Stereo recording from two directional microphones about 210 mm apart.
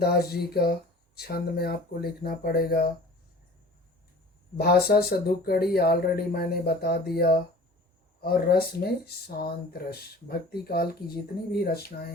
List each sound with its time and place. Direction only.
0.0 s speech: 50° left (ahead or behind)
4.5 s speech: 50° left (ahead or behind)